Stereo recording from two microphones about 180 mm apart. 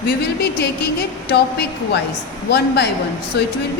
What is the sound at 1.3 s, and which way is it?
A woman's voice, 70° left (ahead or behind).